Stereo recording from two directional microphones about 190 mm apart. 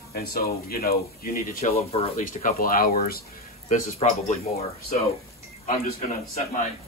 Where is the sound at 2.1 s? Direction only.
45° left (ahead or behind).